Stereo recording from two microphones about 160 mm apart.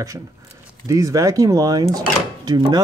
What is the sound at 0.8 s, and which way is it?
Speech, 20° right (ahead or behind).